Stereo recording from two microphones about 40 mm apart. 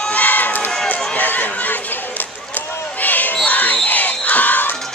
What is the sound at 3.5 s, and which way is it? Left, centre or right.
Crowd, left.